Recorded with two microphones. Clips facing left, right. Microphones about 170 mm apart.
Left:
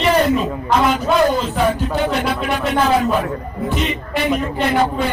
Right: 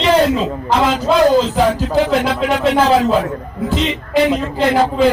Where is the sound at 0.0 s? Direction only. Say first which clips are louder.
Right 2 dB; 90° right.